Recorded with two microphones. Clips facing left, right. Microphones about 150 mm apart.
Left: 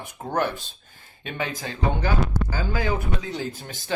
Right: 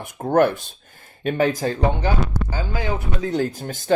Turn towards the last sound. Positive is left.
turn(degrees=-45)  # may be behind; listen again after turning